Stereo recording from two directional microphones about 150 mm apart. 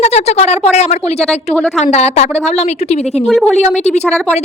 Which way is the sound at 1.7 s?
50° left (ahead or behind).